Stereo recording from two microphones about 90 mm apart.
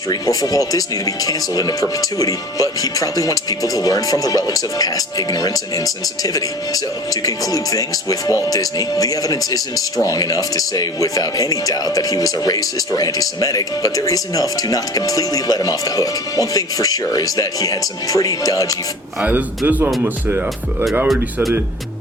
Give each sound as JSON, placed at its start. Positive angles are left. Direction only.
{"t": 0.1, "sound": "speech", "side_deg": 45}
{"t": 19.2, "sound": "a man's voice", "side_deg": -20}